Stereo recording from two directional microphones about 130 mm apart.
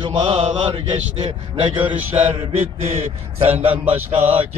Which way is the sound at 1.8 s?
10° right (ahead or behind).